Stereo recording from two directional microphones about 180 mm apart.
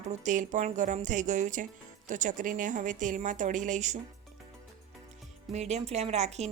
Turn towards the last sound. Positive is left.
turn(degrees=-40)  # may be behind; listen again after turning